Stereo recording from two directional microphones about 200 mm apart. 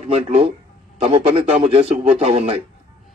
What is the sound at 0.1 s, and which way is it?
A man's voice, 30° right (ahead or behind).